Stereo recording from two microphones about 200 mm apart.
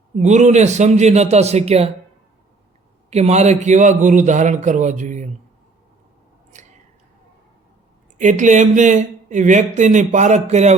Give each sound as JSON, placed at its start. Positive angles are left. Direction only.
{"t": 0.2, "sound": "speech", "side_deg": -35}
{"t": 3.1, "sound": "speech", "side_deg": -35}
{"t": 6.5, "sound": "chewing", "side_deg": -35}
{"t": 8.2, "sound": "speech", "side_deg": -40}